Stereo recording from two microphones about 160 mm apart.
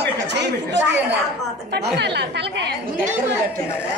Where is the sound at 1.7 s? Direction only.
90° right.